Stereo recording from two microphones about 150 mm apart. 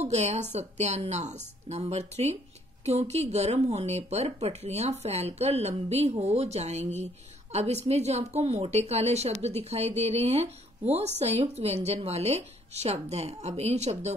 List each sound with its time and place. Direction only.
0.0 s a woman's voice: 45° right (ahead or behind)